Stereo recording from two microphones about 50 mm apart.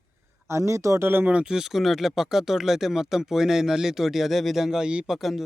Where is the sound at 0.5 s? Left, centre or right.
Right.